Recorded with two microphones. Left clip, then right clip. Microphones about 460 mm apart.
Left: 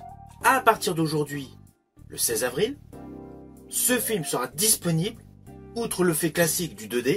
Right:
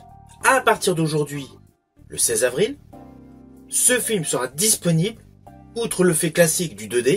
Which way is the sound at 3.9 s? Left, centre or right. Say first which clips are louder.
Right 4 dB; left.